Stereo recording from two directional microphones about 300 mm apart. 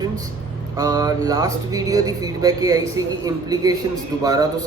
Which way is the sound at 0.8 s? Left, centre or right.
Centre.